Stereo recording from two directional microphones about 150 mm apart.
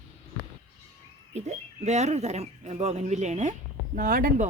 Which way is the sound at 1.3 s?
45° right (ahead or behind).